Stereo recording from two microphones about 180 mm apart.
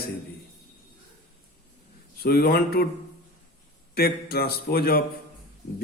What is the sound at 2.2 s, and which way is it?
Speech, 60° left (ahead or behind).